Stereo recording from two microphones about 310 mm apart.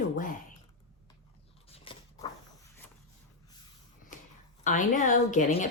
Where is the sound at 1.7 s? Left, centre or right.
Centre.